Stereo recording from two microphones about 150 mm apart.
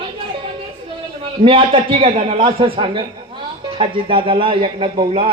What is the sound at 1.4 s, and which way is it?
Speech, 35° right (ahead or behind).